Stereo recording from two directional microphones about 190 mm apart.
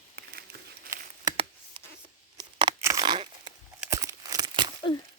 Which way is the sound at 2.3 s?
25° right (ahead or behind).